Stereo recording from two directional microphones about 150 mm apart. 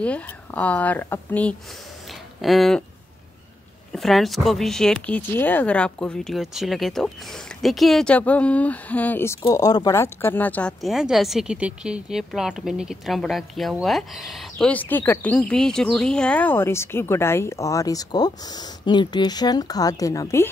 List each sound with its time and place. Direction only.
0.0 s speech: 10° left (ahead or behind)
3.9 s speech: centre (ahead or behind)
9.5 s speech: 25° left (ahead or behind)
10.2 s speech: 10° left (ahead or behind)
10.8 s speech: centre (ahead or behind); by 20.4 s 20° left (ahead or behind)